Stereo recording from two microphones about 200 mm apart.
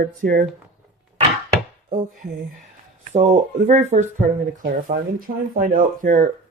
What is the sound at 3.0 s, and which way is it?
Speech, 35° right (ahead or behind).